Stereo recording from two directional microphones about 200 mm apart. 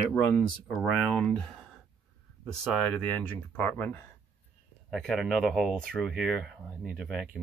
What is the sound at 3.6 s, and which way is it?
Speech, 10° left (ahead or behind).